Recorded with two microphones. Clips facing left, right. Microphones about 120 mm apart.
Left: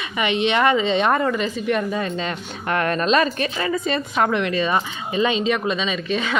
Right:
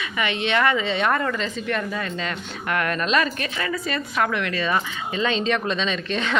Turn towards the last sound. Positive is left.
turn(degrees=5)  # may be behind; listen again after turning